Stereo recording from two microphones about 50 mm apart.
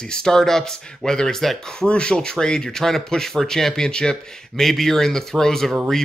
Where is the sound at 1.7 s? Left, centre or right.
Centre.